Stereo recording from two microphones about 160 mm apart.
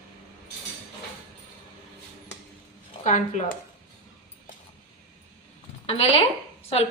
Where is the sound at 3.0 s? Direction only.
50° left (ahead or behind).